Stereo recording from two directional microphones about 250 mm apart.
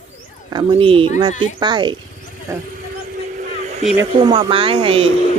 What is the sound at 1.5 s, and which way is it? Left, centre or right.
Speech, centre.